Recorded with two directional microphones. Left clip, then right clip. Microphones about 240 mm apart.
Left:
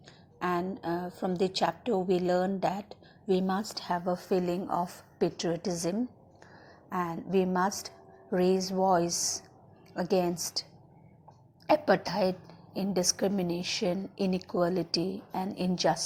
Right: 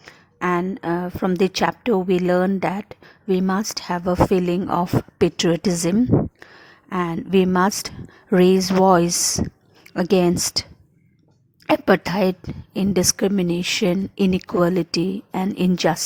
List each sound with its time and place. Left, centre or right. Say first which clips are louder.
0.4 s a woman's voice: right 9 dB; right
6.9 s a woman's voice: right 9 dB; right
11.7 s a woman's voice: right 7 dB; right